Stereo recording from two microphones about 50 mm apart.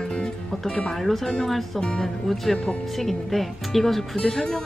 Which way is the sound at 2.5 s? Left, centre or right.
Centre.